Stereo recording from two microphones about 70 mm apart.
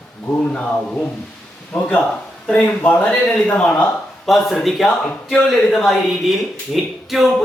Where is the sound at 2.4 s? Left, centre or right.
Left.